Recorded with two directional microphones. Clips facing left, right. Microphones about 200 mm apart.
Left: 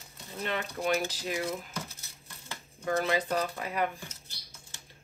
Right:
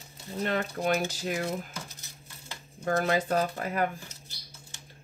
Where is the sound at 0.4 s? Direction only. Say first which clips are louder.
Right 4 dB; 45° right (ahead or behind).